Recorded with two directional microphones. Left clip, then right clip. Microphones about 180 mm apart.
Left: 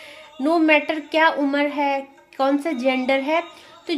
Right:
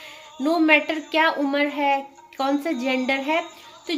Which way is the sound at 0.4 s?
45° left (ahead or behind).